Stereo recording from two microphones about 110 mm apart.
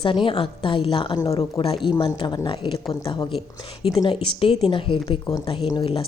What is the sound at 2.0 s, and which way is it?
A woman's voice, 45° left (ahead or behind).